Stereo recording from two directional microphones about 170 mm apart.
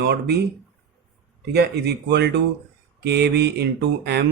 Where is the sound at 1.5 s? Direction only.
70° right (ahead or behind).